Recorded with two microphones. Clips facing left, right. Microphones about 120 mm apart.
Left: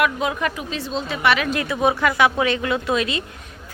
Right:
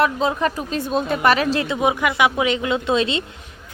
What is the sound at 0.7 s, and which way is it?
A woman's voice, 50° right (ahead or behind).